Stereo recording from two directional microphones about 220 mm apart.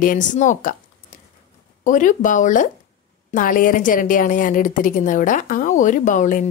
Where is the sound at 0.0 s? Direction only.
35° left (ahead or behind).